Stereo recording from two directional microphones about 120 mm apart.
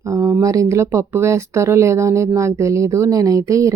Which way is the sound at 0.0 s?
25° right (ahead or behind).